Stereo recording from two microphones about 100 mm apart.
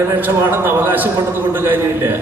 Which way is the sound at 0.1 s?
20° right (ahead or behind).